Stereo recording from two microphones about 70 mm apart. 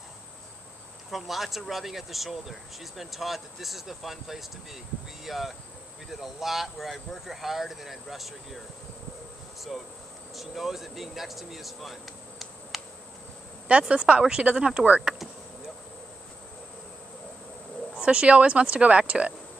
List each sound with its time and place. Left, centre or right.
1.1 s speech: centre
9.6 s speech: centre
13.7 s speech: centre
17.9 s speech: centre